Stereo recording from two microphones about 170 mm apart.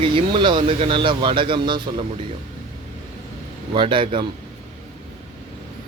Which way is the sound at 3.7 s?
30° right (ahead or behind).